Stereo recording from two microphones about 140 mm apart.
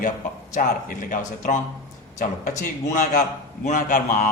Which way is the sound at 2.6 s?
65° left (ahead or behind).